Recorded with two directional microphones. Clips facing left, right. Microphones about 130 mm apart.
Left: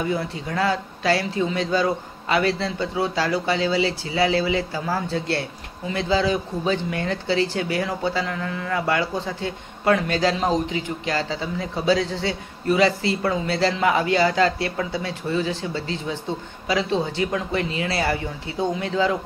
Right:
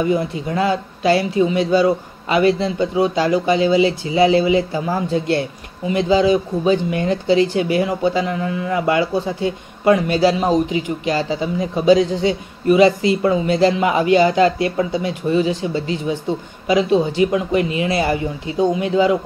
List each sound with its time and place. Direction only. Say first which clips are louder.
0.1 s a man's voice: right 6 dB; 20° right (ahead or behind)